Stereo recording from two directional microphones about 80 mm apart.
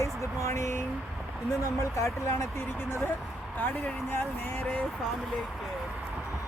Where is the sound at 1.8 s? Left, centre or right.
Left.